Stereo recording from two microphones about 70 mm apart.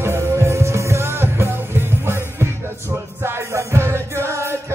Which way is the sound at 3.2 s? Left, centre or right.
Right.